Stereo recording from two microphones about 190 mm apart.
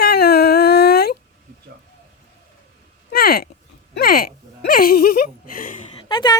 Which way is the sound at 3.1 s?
50° left (ahead or behind).